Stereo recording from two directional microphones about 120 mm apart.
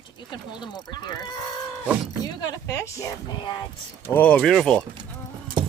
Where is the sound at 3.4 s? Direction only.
40° left (ahead or behind).